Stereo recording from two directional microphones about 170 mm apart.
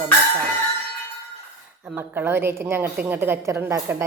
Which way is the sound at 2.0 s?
15° right (ahead or behind).